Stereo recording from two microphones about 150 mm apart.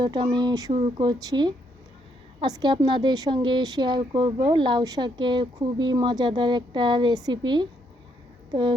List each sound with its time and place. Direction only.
0.0 s speech: 30° right (ahead or behind)